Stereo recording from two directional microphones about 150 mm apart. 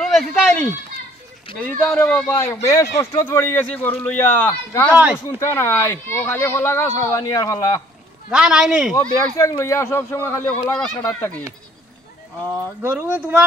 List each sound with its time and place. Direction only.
0.0 s speech: 5° left (ahead or behind); by 7.8 s 20° left (ahead or behind)
8.3 s speech: 5° right (ahead or behind)
9.4 s speech: 20° left (ahead or behind)
12.4 s speech: 15° right (ahead or behind)